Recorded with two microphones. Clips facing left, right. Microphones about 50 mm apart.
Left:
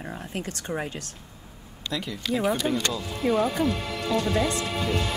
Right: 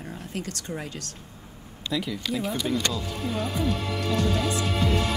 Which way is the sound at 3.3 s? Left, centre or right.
Left.